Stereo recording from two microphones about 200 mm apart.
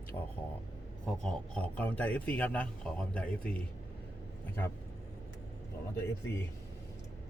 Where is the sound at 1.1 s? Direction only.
Centre (ahead or behind).